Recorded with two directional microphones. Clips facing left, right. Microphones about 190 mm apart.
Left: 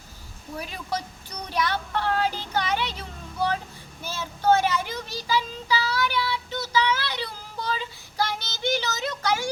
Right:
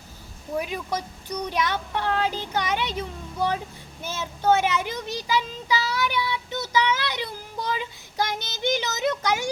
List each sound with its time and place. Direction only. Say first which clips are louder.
0.6 s speech: right 2 dB; 15° right (ahead or behind)
4.0 s speech: even; 20° right (ahead or behind)
7.7 s child singing: even; 20° right (ahead or behind)